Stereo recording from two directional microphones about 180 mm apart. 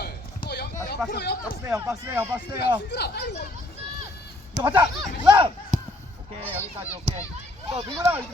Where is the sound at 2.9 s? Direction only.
65° left (ahead or behind).